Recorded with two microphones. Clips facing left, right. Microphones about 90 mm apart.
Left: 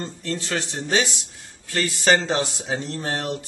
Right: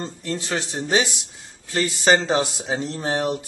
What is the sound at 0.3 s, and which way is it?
Speech, 20° right (ahead or behind).